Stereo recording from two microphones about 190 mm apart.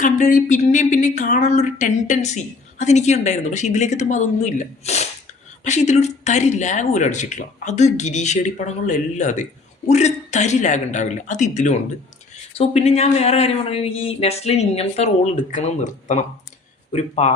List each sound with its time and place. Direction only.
0.0 s speech: 45° left (ahead or behind)